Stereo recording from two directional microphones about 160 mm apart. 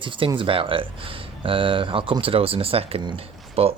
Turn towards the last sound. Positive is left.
turn(degrees=-35)  # may be behind; listen again after turning